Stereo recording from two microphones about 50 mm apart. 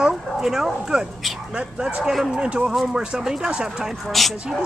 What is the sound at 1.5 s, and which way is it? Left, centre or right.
Speech, right.